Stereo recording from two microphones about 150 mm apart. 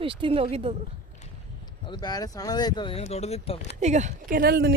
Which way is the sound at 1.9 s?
25° left (ahead or behind).